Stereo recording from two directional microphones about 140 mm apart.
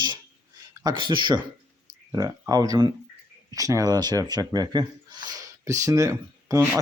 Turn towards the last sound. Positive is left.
turn(degrees=-25)  # may be behind; listen again after turning